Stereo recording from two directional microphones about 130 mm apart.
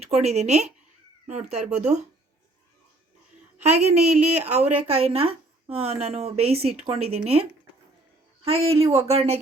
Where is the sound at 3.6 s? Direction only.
60° right (ahead or behind).